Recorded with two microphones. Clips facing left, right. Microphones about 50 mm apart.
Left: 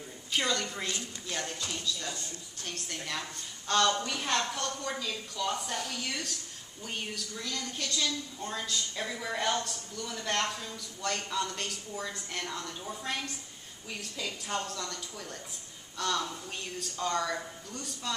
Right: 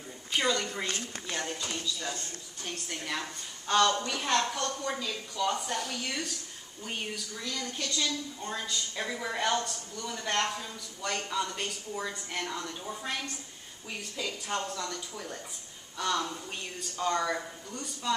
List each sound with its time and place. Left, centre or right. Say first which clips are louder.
0.3 s a woman's voice: right 2 dB; centre
0.8 s a woman's voice: right 2 dB; right
1.3 s a woman's voice: right 1 dB; centre